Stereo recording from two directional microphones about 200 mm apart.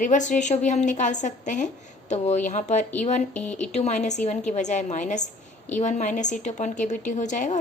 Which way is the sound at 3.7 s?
35° left (ahead or behind).